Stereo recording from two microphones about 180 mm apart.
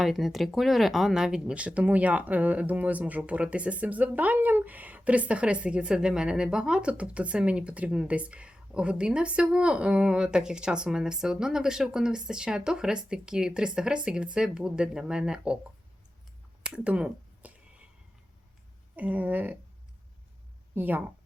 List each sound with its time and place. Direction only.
0.0 s speech: centre (ahead or behind)
16.6 s a sound: 5° right (ahead or behind)
18.9 s speech: 10° right (ahead or behind)
20.7 s speech: 10° right (ahead or behind)